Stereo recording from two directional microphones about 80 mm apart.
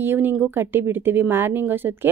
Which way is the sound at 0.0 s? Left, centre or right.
Right.